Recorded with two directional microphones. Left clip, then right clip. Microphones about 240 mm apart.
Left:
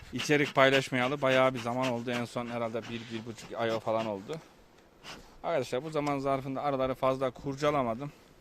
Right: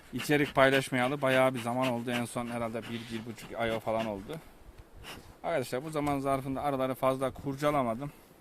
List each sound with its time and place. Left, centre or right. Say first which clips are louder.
0.1 s speech: left 1 dB; left